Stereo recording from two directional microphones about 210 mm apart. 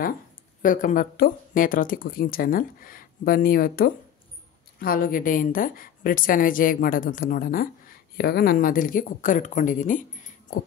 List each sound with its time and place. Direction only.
0.6 s a woman's voice: 40° left (ahead or behind)